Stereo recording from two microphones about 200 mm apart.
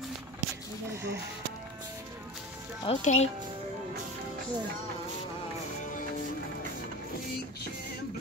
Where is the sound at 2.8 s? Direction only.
30° left (ahead or behind).